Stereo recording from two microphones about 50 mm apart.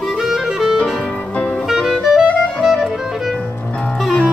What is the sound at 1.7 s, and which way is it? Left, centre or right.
Clarinet, centre.